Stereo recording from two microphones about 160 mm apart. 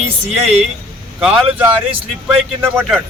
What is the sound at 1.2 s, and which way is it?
Speech, 5° right (ahead or behind).